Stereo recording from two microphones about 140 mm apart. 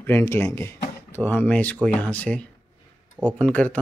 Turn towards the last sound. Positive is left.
turn(degrees=10)  # may be behind; listen again after turning